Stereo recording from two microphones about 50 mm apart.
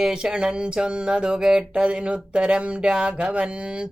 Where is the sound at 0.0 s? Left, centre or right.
Centre.